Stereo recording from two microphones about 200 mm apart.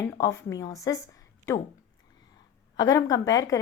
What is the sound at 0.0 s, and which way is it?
Speech, 15° left (ahead or behind).